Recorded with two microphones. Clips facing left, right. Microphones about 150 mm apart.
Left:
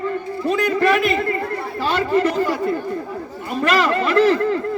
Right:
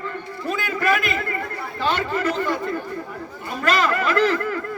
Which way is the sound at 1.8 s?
30° left (ahead or behind).